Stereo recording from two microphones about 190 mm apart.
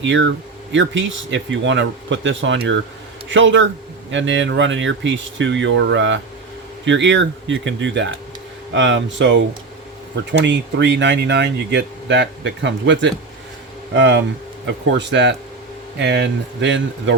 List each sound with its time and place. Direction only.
0.0 s speech: 75° right (ahead or behind)